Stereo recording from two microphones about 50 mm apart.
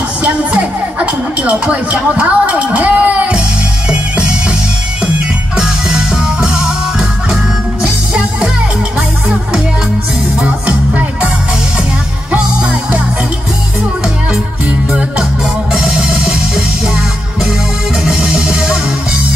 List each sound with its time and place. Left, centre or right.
0.2 s music: right
5.6 s music: centre
12.3 s music: right
14.3 s music: centre